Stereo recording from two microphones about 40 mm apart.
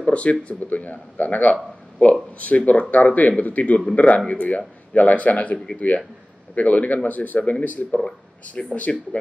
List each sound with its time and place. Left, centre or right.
0.0 s speech: left